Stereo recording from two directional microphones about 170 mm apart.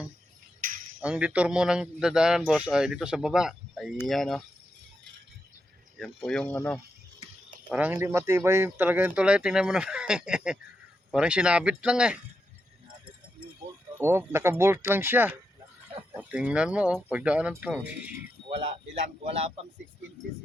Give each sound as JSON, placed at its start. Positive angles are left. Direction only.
{"t": 1.0, "sound": "a man's voice", "side_deg": -5}
{"t": 6.0, "sound": "a man's voice", "side_deg": 5}
{"t": 7.7, "sound": "a man's voice", "side_deg": -10}
{"t": 14.0, "sound": "speech", "side_deg": -15}
{"t": 18.4, "sound": "a man's voice", "side_deg": -35}